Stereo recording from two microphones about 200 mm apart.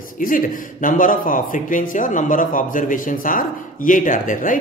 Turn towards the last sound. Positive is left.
turn(degrees=40)  # may be behind; listen again after turning